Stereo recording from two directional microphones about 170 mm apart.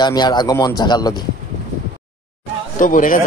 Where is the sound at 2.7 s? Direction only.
50° left (ahead or behind).